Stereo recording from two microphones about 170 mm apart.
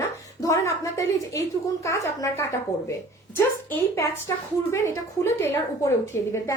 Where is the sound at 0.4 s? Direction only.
20° left (ahead or behind).